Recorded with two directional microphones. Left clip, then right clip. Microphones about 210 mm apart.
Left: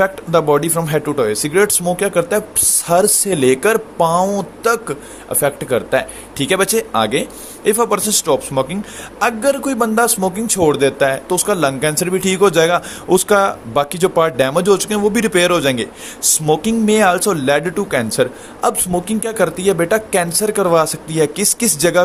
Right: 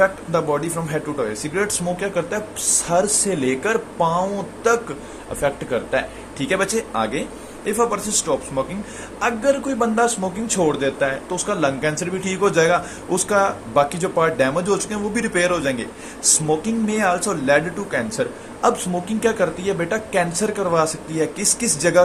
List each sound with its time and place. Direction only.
0.0 s speech: 50° left (ahead or behind)